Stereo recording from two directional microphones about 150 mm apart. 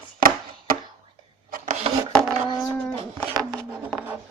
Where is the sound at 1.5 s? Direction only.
55° right (ahead or behind).